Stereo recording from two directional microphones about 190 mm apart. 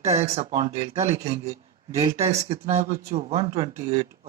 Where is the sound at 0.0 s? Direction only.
35° right (ahead or behind).